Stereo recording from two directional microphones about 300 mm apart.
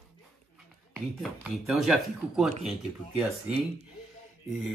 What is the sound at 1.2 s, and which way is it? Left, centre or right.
Speech, centre.